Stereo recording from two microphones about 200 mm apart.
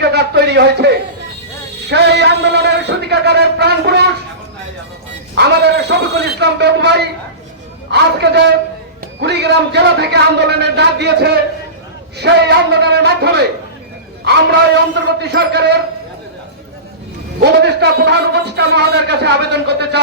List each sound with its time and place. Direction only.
0.0 s a sound: 55° right (ahead or behind)
1.9 s a man's voice: 55° right (ahead or behind)
5.3 s a man's voice: 55° right (ahead or behind)
17.4 s a man's voice: 55° right (ahead or behind)